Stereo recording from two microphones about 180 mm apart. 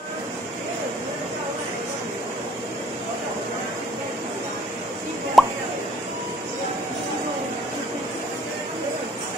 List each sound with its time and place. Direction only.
5.4 s plop: centre (ahead or behind)